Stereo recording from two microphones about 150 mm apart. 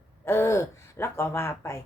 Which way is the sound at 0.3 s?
15° left (ahead or behind).